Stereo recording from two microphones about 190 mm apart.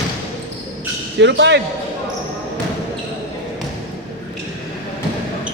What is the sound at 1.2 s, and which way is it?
Speech, 70° right (ahead or behind).